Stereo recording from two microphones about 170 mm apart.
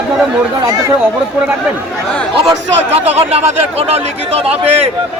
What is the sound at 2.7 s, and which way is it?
Speech, 40° right (ahead or behind).